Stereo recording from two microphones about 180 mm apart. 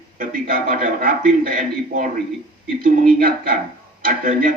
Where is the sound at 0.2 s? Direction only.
50° right (ahead or behind).